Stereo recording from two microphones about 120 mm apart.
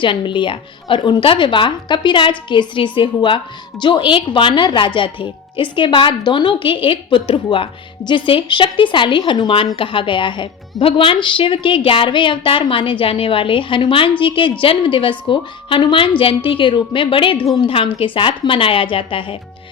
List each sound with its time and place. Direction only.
0.0 s speech: 45° left (ahead or behind)